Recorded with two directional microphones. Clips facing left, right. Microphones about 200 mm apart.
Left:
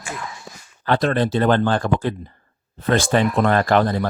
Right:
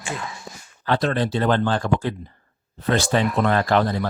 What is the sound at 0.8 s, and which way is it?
Speech, 55° left (ahead or behind).